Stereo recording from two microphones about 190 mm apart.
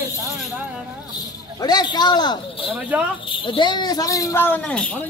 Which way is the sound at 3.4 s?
25° left (ahead or behind).